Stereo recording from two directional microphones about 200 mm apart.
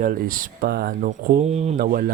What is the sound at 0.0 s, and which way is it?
Speech, 45° right (ahead or behind).